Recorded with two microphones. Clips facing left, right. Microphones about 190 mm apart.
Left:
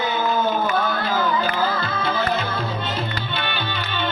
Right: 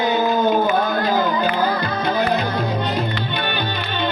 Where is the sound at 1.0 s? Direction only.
15° right (ahead or behind).